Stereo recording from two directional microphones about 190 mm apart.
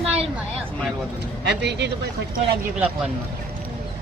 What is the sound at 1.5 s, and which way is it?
Speech, 65° right (ahead or behind).